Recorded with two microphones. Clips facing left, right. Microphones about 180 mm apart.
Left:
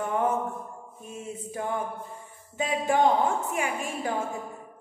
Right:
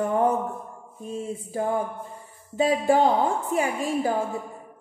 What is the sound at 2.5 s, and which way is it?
A woman's voice, 35° right (ahead or behind).